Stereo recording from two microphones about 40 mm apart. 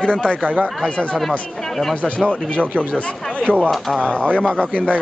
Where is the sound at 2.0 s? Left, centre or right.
Left.